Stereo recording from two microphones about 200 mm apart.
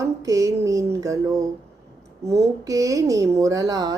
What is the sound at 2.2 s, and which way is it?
A woman's voice, 15° right (ahead or behind).